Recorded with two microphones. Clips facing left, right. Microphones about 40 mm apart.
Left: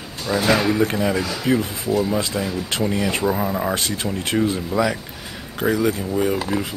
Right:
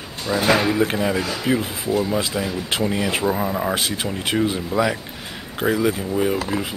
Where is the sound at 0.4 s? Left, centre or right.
Centre.